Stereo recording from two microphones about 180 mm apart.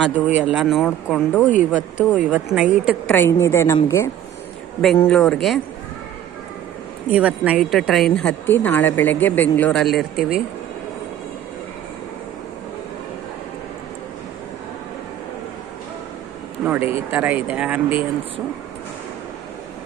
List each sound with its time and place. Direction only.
0.3 s a woman's voice: 5° right (ahead or behind)
2.0 s a woman's voice: 5° right (ahead or behind)
3.1 s a woman's voice: 15° left (ahead or behind)
7.1 s a woman's voice: 10° right (ahead or behind)
16.6 s speech: 10° right (ahead or behind)